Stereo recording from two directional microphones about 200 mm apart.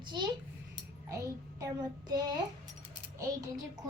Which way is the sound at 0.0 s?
20° right (ahead or behind).